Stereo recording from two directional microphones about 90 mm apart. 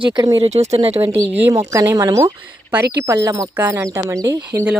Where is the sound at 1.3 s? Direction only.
25° right (ahead or behind).